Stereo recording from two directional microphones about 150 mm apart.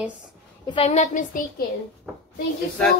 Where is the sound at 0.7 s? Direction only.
40° left (ahead or behind).